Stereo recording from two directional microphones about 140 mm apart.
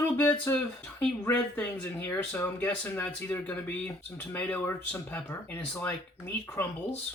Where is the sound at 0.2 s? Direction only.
15° left (ahead or behind).